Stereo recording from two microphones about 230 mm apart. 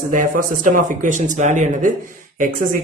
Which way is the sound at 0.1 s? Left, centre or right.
Right.